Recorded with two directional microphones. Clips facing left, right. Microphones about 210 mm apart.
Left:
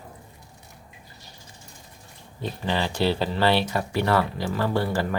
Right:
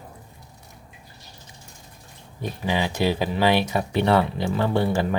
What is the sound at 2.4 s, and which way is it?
Speech, 10° right (ahead or behind).